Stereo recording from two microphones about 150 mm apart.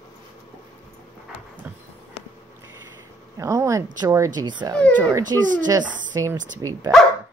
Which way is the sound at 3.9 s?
20° right (ahead or behind).